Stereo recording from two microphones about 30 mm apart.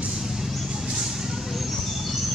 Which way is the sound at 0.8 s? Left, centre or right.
Right.